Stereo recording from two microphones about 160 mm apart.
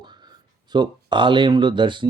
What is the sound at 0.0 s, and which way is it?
Speech, 30° right (ahead or behind).